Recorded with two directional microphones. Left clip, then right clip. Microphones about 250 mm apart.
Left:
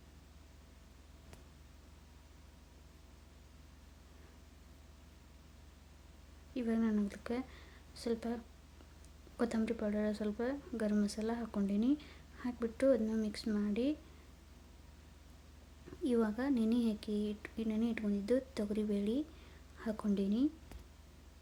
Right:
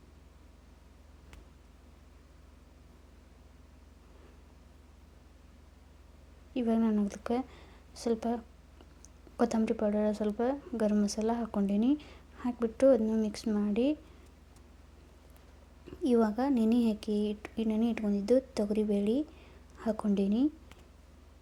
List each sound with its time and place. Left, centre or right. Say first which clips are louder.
6.5 s speech: right 6 dB; centre
9.4 s a woman's voice: right 7 dB; centre
16.0 s a woman's voice: right 6 dB; centre